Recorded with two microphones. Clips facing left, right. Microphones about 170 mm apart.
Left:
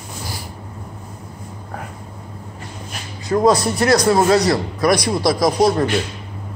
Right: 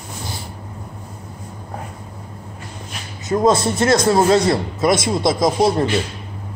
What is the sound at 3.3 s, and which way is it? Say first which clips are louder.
Speech: left 1 dB; 20° right (ahead or behind).